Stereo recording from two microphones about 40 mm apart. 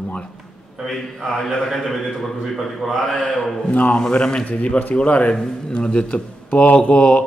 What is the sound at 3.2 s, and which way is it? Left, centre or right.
Speech, left.